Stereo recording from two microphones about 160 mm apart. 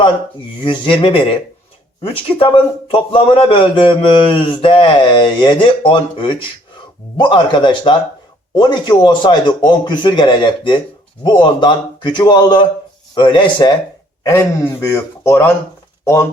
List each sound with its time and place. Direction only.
0.6 s a man's voice: 30° left (ahead or behind)
14.3 s speech: 20° left (ahead or behind)